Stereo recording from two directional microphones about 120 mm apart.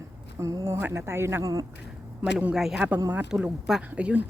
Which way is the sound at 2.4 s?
5° right (ahead or behind).